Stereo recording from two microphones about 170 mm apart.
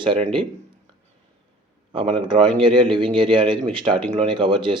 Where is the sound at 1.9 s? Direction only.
30° right (ahead or behind).